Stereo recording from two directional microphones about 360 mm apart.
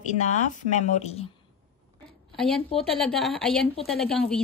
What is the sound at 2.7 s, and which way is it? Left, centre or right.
Speech, centre.